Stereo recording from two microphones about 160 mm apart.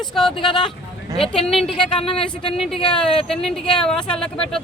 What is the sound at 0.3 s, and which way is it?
Speech, 30° left (ahead or behind).